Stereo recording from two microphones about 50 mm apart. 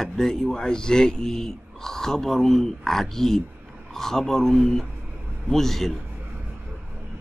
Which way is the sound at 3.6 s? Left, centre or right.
Right.